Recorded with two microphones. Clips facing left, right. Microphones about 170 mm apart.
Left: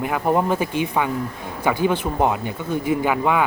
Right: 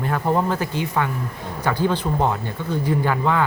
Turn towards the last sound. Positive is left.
turn(degrees=15)  # may be behind; listen again after turning